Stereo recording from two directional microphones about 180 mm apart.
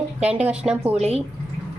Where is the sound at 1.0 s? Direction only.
35° right (ahead or behind).